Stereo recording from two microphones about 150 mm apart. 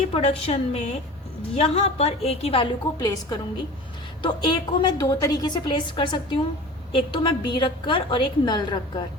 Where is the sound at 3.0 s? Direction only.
25° left (ahead or behind).